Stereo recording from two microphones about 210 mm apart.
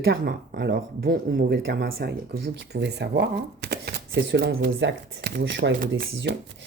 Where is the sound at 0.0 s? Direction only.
45° right (ahead or behind).